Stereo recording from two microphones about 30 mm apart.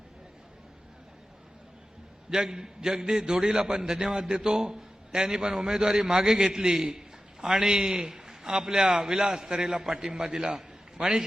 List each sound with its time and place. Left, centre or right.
2.3 s a man's voice: right